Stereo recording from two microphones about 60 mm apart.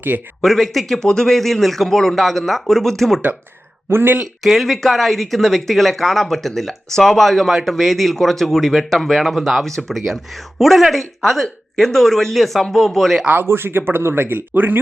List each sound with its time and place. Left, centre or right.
0.1 s speech: right
0.4 s speech: centre
3.8 s speech: right
4.2 s speech: centre
13.2 s speech: right